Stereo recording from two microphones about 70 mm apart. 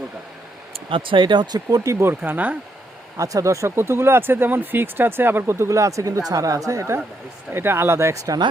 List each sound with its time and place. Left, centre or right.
1.3 s speech: right
1.8 s speech: right
3.2 s speech: right
3.8 s speech: right
5.6 s speech: right